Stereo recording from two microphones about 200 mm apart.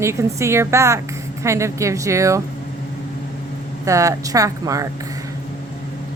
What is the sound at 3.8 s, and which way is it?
Speech, 15° right (ahead or behind).